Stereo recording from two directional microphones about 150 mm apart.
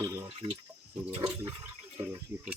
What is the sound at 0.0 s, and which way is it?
Water, 20° right (ahead or behind).